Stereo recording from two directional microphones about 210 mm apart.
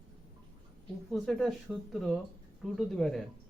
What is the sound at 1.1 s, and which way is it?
Speech, centre (ahead or behind).